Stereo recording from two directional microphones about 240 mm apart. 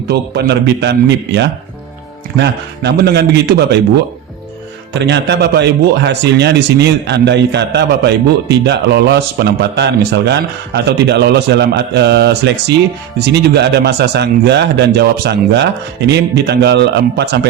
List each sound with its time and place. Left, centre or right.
0.1 s a man's voice: right
4.9 s a man's voice: right